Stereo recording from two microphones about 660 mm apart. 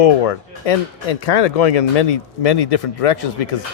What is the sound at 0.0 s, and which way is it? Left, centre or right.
Speech, left.